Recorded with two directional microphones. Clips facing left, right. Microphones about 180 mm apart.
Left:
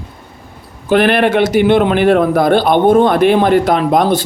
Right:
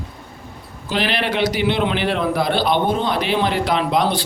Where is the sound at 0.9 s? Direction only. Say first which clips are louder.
Left 11 dB; 55° left (ahead or behind).